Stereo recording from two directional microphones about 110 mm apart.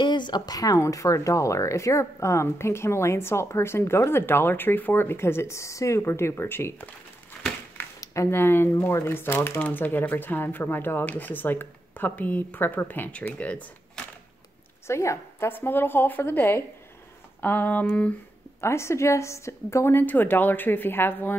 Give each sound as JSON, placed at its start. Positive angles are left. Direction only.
{"t": 0.0, "sound": "speech", "side_deg": 45}
{"t": 8.0, "sound": "speech", "side_deg": 25}
{"t": 14.9, "sound": "speech", "side_deg": 25}
{"t": 18.6, "sound": "speech", "side_deg": 25}